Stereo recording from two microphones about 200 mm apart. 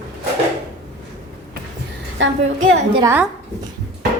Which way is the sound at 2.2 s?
85° right.